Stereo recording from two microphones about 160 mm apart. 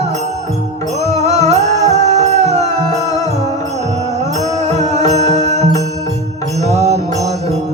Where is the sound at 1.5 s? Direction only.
45° right (ahead or behind).